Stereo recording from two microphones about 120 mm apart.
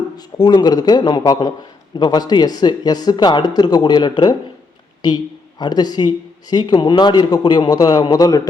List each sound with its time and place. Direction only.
0.2 s speech: 35° left (ahead or behind)